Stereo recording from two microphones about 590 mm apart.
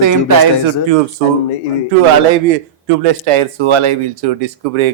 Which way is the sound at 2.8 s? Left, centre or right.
Right.